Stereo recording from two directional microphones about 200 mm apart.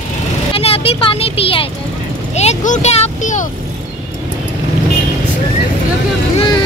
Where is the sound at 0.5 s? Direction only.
30° left (ahead or behind).